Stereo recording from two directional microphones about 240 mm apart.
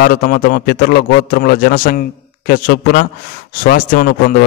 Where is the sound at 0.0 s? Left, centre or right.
Left.